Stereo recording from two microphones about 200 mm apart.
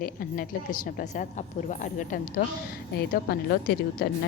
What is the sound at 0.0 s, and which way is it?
A woman's voice, 45° left (ahead or behind).